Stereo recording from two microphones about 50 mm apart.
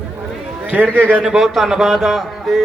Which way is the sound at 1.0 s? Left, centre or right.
Right.